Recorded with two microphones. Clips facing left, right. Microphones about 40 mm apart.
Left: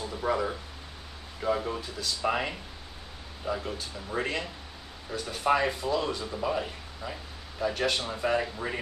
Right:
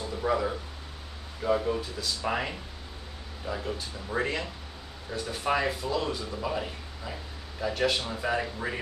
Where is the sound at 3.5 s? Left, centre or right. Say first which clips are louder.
Right 1 dB; centre.